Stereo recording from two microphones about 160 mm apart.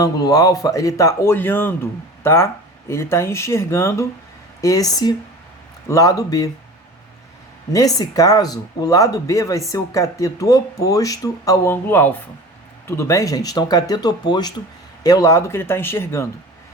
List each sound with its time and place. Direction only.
0.0 s speech: 20° left (ahead or behind)
7.7 s speech: 20° left (ahead or behind)